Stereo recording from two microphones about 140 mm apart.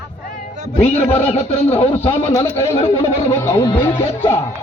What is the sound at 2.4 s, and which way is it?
A man's voice, 20° left (ahead or behind).